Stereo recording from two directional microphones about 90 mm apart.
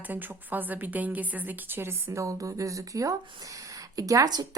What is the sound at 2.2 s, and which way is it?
A woman's voice, 35° right (ahead or behind).